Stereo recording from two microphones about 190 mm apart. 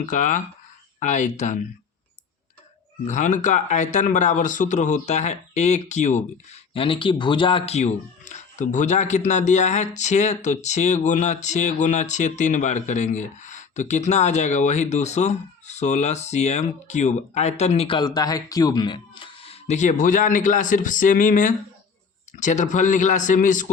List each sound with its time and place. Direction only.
0.0 s speech: 40° left (ahead or behind)
3.1 s speech: 40° left (ahead or behind)